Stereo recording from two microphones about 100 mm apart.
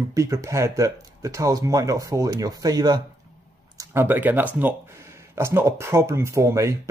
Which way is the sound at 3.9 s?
20° right (ahead or behind).